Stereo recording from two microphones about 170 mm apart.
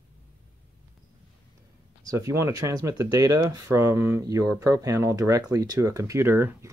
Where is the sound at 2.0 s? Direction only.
20° right (ahead or behind).